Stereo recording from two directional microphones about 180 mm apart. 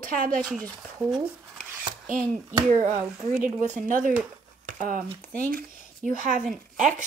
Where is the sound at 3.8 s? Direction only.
45° right (ahead or behind).